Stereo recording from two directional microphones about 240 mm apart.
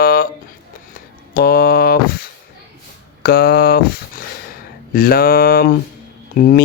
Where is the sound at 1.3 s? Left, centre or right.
Left.